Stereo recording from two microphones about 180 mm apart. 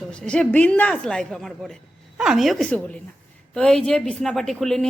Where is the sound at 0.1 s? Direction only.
5° left (ahead or behind).